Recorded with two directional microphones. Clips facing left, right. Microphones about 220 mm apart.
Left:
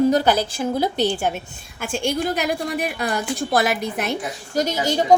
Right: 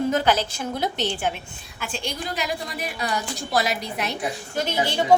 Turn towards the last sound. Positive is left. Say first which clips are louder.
# left 3 dB
turn(degrees=40)  # may be behind; listen again after turning